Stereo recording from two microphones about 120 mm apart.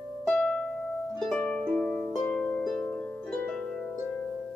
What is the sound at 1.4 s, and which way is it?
Harp, 10° left (ahead or behind).